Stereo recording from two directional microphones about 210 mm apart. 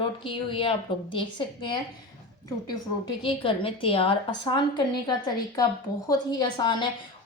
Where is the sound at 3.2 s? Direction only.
25° left (ahead or behind).